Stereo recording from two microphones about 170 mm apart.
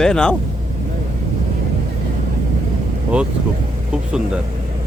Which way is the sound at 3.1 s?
5° right (ahead or behind).